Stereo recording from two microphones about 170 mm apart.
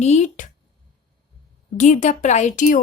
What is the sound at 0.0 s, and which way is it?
Speech, 40° left (ahead or behind).